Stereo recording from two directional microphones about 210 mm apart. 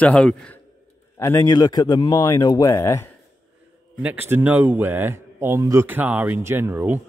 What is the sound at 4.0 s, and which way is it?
A man's voice, 10° right (ahead or behind).